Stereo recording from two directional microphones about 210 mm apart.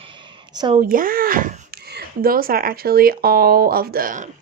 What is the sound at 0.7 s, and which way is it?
Speech, 40° right (ahead or behind).